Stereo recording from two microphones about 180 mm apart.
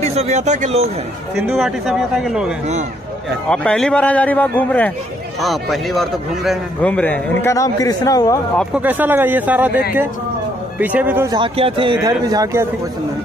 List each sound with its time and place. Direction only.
0.1 s speech: 40° right (ahead or behind)
1.3 s a man's voice: 5° right (ahead or behind); by 8.4 s 20° left (ahead or behind)
8.7 s speech: 10° right (ahead or behind)
10.8 s speech: 10° right (ahead or behind)
11.3 s speech: 30° right (ahead or behind)